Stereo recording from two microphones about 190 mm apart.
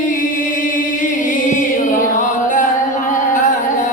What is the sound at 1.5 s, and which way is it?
Music, 45° left (ahead or behind).